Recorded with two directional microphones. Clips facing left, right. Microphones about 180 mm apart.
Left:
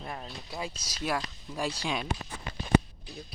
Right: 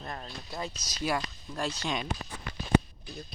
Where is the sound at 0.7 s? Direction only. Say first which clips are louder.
Right 1 dB; 30° left (ahead or behind).